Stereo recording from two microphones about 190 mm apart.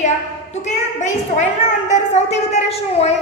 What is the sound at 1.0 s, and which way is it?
A woman's voice, 40° left (ahead or behind).